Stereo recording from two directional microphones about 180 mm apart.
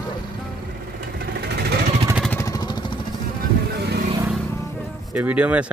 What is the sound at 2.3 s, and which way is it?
Vehicle, 15° left (ahead or behind).